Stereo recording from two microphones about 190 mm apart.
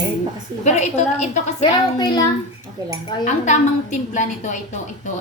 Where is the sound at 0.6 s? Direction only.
40° left (ahead or behind).